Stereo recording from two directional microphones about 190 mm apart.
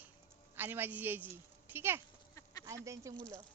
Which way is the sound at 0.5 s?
10° right (ahead or behind).